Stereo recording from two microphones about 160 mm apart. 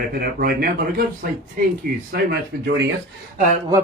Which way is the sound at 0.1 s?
70° right (ahead or behind).